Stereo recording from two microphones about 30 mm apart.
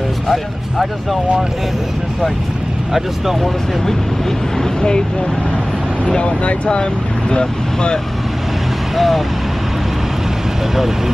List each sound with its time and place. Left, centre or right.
6.0 s speech: left
8.9 s speech: centre